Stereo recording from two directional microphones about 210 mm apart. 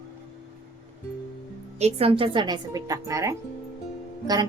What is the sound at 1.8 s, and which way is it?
A woman's voice, 25° right (ahead or behind).